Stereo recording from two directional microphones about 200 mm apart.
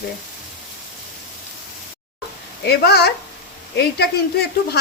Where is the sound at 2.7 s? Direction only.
55° left (ahead or behind).